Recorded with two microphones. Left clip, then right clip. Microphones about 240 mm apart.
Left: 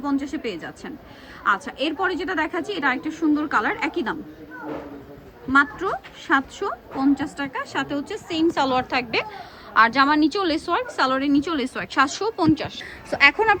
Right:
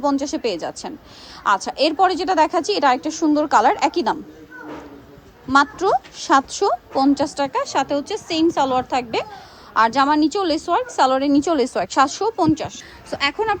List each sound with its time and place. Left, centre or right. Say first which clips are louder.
0.0 s a woman's voice: right 6 dB; centre
5.5 s a woman's voice: right 4 dB; centre